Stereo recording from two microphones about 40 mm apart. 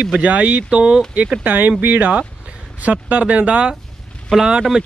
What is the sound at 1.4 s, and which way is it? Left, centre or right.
Speech, right.